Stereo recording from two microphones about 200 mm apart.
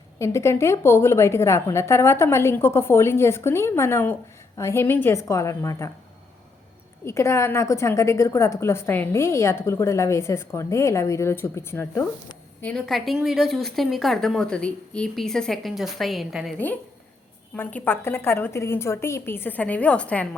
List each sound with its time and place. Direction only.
0.2 s a woman's voice: 15° left (ahead or behind)
7.0 s a woman's voice: 15° left (ahead or behind)
17.5 s a woman's voice: 10° left (ahead or behind)